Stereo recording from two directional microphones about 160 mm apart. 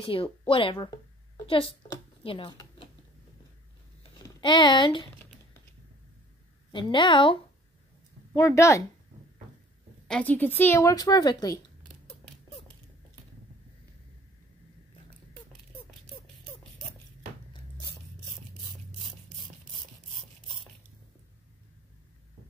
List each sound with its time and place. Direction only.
0.0 s speech: 35° left (ahead or behind)
4.4 s speech: 30° left (ahead or behind)
6.7 s a woman's voice: 30° left (ahead or behind)
8.3 s speech: 20° left (ahead or behind)
10.0 s speech: 5° left (ahead or behind); by 11.6 s 25° left (ahead or behind)